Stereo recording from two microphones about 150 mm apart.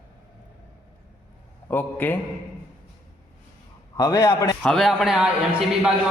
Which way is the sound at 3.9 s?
20° left (ahead or behind).